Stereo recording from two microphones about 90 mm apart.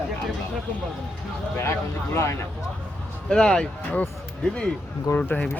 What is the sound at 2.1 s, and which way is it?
Speech, 30° left (ahead or behind).